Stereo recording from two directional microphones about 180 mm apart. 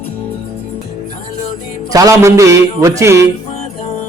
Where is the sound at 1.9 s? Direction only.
20° right (ahead or behind).